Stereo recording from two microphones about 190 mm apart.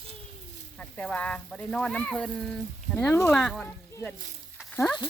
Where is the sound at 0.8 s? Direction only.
5° left (ahead or behind).